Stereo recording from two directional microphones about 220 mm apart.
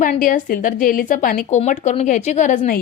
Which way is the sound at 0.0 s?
35° left (ahead or behind).